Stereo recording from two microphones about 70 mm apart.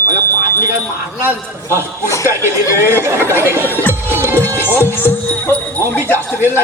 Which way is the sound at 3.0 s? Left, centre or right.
Right.